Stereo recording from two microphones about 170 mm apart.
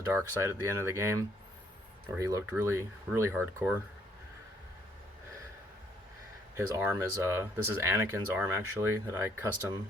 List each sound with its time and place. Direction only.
0.1 s speech: 15° right (ahead or behind)
6.6 s speech: 15° right (ahead or behind)